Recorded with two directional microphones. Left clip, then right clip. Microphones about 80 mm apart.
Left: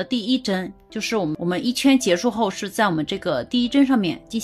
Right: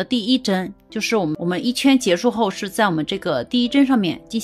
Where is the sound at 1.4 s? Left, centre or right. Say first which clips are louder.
Right 1 dB; right.